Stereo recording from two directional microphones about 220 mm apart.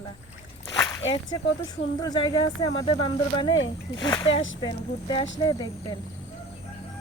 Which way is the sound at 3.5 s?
60° left (ahead or behind).